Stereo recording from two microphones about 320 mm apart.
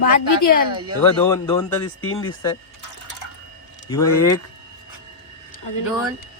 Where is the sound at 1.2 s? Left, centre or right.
Centre.